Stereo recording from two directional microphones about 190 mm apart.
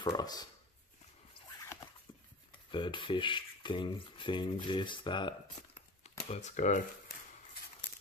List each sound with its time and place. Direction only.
0.0 s speech: 20° left (ahead or behind)
2.7 s speech: 25° left (ahead or behind)
5.8 s a sound: 35° left (ahead or behind)